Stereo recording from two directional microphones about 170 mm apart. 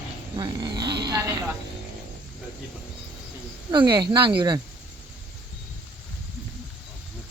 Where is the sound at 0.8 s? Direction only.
25° right (ahead or behind).